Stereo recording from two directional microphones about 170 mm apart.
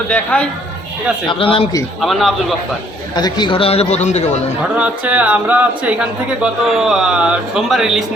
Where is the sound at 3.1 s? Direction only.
25° left (ahead or behind); by 4.5 s 40° left (ahead or behind).